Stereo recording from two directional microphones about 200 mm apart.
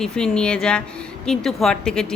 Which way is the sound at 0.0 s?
5° left (ahead or behind).